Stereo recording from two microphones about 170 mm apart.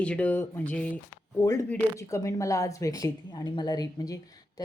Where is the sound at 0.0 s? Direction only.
5° left (ahead or behind).